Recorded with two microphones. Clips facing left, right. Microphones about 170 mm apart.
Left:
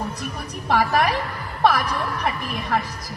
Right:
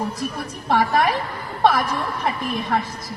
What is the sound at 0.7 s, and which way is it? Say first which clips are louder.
A man's voice: right 1 dB; 25° right (ahead or behind).